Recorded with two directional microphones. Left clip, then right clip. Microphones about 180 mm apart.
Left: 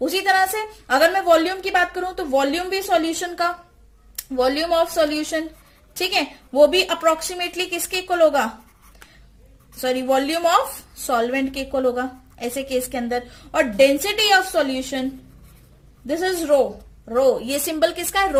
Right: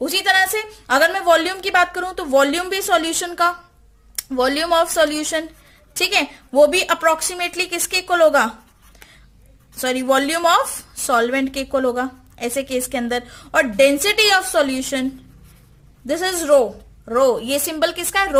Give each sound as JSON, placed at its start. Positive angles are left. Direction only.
{"t": 0.0, "sound": "a sound", "side_deg": -40}
{"t": 0.9, "sound": "a woman's voice", "side_deg": -40}
{"t": 9.8, "sound": "a woman's voice", "side_deg": -35}
{"t": 16.0, "sound": "a woman's voice", "side_deg": -40}